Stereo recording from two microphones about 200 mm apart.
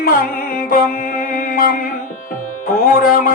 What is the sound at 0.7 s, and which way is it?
Music, 45° left (ahead or behind).